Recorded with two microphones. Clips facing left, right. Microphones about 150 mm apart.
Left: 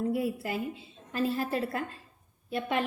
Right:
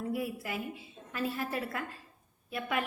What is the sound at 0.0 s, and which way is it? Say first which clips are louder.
A woman's voice: left 5 dB; 25° left (ahead or behind).